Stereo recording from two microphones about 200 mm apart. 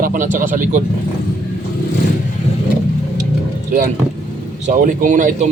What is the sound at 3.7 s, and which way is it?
Speech, 40° right (ahead or behind).